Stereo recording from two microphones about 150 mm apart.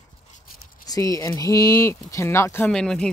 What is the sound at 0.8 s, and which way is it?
Speech, 25° left (ahead or behind).